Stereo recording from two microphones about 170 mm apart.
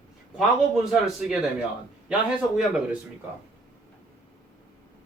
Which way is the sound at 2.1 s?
5° right (ahead or behind).